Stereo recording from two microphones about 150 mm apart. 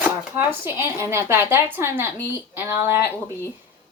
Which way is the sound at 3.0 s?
15° left (ahead or behind).